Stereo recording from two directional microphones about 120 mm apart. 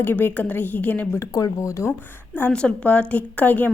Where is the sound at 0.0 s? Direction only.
15° left (ahead or behind).